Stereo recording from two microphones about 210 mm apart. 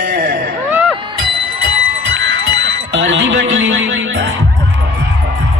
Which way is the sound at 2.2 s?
60° right (ahead or behind).